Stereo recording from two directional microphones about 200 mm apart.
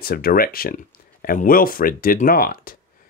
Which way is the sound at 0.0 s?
45° left (ahead or behind).